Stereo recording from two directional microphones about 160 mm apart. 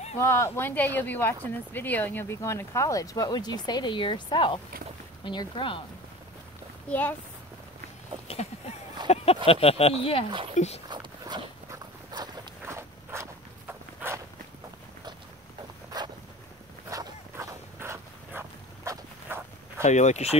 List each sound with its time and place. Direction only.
0.2 s speech: 15° left (ahead or behind); by 5.8 s 30° left (ahead or behind)
6.9 s speech: 10° left (ahead or behind)
8.3 s a sound: 40° left (ahead or behind)
9.5 s speech: 40° left (ahead or behind)
10.9 s walk: 30° right (ahead or behind)
16.9 s a sound: 20° right (ahead or behind)
19.8 s speech: 45° left (ahead or behind)